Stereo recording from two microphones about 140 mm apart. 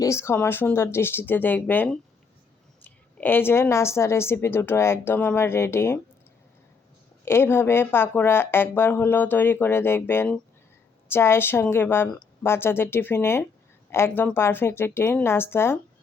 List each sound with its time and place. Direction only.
0.0 s a woman's voice: 20° left (ahead or behind)
7.3 s a woman's voice: 15° left (ahead or behind)